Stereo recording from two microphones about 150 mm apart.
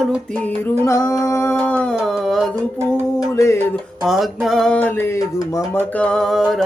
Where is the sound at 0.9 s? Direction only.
20° left (ahead or behind).